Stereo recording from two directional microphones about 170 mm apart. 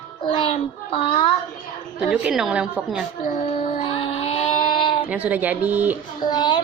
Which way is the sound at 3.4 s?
35° left (ahead or behind).